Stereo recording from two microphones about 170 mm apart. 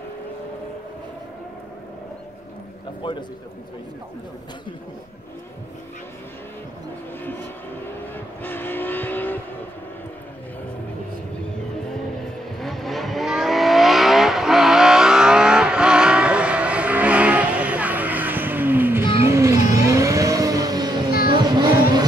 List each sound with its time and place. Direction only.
3.0 s a man's voice: 30° left (ahead or behind)
8.0 s vehicle: 10° left (ahead or behind)
12.5 s vehicle: centre (ahead or behind); by 22.0 s 25° right (ahead or behind)